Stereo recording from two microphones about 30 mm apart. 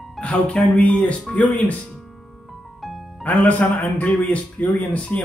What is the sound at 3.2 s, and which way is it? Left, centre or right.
Speech, left.